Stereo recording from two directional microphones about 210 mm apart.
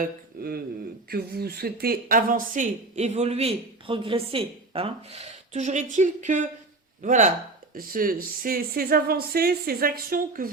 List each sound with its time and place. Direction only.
0.0 s speech: 45° right (ahead or behind)